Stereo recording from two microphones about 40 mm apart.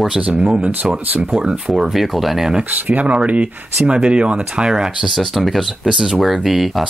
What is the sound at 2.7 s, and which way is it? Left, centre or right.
Speech, right.